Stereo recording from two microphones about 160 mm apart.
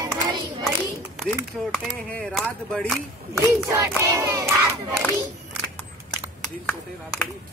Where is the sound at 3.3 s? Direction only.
20° right (ahead or behind).